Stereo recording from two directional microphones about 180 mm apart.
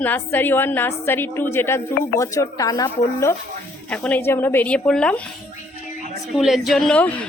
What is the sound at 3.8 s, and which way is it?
A woman's voice, 5° left (ahead or behind).